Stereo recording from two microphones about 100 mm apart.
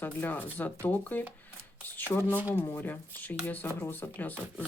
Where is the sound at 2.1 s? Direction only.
20° left (ahead or behind).